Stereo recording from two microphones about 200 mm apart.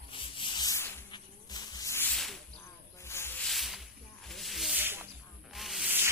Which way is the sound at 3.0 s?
15° left (ahead or behind).